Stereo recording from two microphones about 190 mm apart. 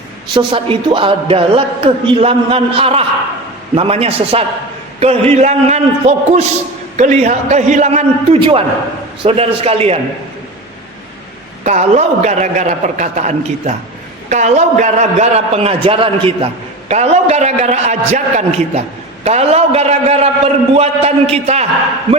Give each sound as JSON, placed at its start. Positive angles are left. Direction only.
{"t": 0.3, "sound": "a man's voice", "side_deg": -25}
{"t": 11.6, "sound": "a man's voice", "side_deg": -35}